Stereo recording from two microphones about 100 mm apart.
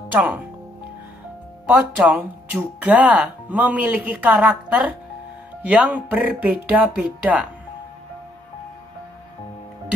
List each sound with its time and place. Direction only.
0.1 s speech: 15° right (ahead or behind)
1.7 s speech: 15° right (ahead or behind)